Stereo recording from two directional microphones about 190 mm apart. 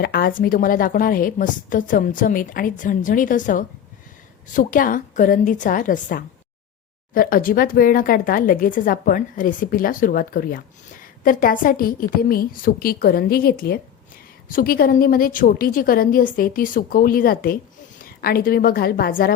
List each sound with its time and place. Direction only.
0.0 s a woman's voice: 50° left (ahead or behind)